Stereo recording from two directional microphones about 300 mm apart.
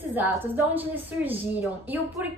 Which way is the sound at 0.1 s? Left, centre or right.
Centre.